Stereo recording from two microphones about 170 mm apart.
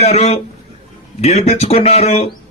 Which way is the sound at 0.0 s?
40° left (ahead or behind).